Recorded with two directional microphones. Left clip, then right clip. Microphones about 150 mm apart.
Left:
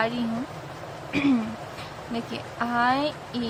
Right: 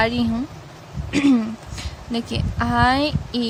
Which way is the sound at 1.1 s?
80° right.